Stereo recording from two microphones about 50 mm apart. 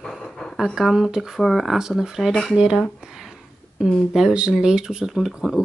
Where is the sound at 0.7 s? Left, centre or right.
Centre.